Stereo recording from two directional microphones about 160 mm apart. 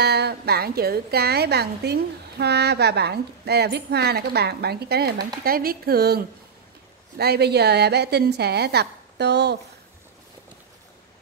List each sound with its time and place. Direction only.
0.0 s a woman's voice: 90° right
7.2 s a woman's voice: 90° right